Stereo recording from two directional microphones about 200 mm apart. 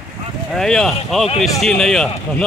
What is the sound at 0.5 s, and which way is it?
Speech, centre (ahead or behind).